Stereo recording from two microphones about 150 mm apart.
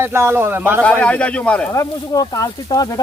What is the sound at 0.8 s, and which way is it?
Speech, 10° left (ahead or behind).